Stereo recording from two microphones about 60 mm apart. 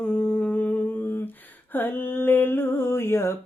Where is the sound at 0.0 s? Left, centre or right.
Centre; by 1.3 s left.